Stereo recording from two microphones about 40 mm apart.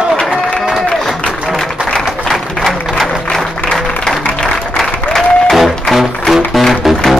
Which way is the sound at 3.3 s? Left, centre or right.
Centre.